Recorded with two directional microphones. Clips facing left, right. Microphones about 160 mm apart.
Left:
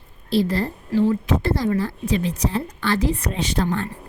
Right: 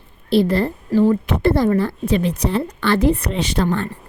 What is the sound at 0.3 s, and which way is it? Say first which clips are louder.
A woman's voice: right 4 dB; 60° right (ahead or behind).